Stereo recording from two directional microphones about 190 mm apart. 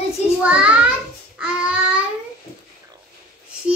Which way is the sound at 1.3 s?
5° right (ahead or behind).